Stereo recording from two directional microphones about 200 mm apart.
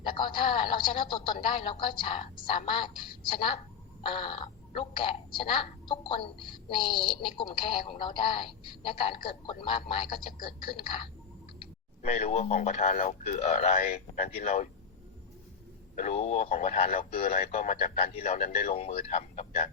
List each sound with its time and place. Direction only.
0.0 s speech: 25° left (ahead or behind)
16.0 s speech: 35° left (ahead or behind)
18.7 s speech: 30° left (ahead or behind)